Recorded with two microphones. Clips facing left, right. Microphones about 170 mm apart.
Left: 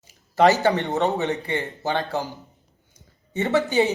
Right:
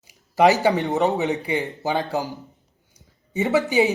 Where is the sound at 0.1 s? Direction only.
15° right (ahead or behind).